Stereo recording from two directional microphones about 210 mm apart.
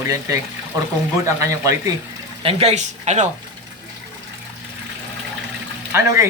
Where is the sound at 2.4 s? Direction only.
30° right (ahead or behind).